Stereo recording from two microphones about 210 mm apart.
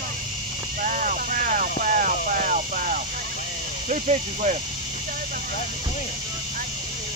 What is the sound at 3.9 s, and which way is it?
Speech, 35° right (ahead or behind).